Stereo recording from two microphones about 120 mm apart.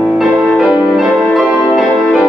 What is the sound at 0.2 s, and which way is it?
Music, 5° right (ahead or behind).